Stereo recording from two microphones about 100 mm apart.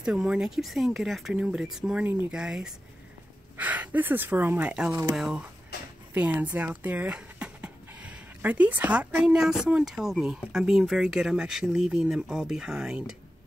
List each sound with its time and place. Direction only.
0.0 s speech: 5° right (ahead or behind)
3.5 s speech: 15° right (ahead or behind)
5.1 s speech: 5° right (ahead or behind)
6.1 s speech: 15° right (ahead or behind)